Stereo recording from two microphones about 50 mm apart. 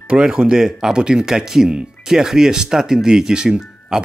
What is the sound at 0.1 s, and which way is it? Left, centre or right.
Speech, centre.